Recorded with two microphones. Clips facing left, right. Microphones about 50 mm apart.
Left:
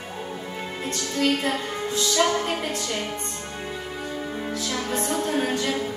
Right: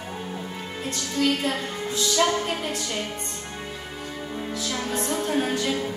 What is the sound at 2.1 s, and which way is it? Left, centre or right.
Music, left.